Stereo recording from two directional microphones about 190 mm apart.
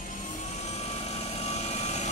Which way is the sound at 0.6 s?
35° left (ahead or behind).